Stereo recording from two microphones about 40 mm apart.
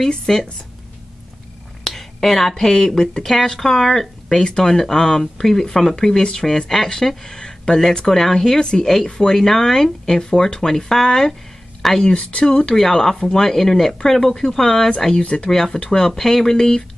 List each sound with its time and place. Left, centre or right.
0.1 s speech: centre
1.9 s speech: centre
7.2 s speech: centre
8.5 s speech: left
9.4 s speech: centre
12.1 s speech: left
12.7 s speech: centre
15.2 s speech: left
15.5 s speech: centre